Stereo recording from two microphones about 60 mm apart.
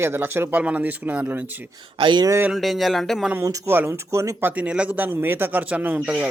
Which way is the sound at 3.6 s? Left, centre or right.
Right.